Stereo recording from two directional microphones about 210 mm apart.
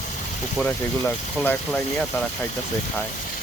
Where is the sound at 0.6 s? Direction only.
10° left (ahead or behind).